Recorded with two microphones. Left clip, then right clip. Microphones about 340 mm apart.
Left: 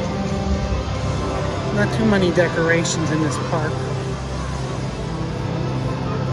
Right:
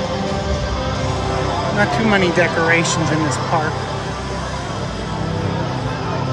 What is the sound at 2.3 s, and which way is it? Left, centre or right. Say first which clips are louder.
Speech: right 2 dB; centre.